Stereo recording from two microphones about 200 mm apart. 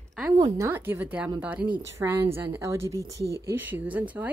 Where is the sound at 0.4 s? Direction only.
15° right (ahead or behind).